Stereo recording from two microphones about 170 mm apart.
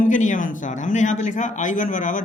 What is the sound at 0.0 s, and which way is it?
Speech, 50° left (ahead or behind).